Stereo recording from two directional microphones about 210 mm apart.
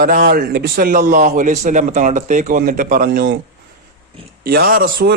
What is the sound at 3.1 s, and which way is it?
Speech, 55° right (ahead or behind).